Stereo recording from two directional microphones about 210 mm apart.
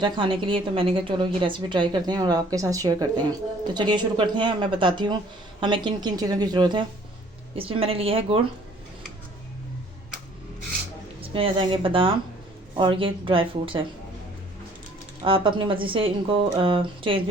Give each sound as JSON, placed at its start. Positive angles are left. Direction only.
{"t": 0.0, "sound": "a woman's voice", "side_deg": -25}
{"t": 11.2, "sound": "a woman's voice", "side_deg": -25}
{"t": 15.2, "sound": "a woman's voice", "side_deg": -25}